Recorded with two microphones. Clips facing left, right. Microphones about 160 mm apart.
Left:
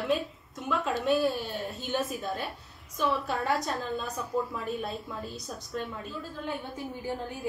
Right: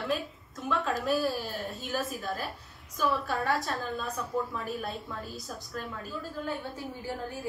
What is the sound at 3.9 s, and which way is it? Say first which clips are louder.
A woman's voice: left 2 dB; centre (ahead or behind).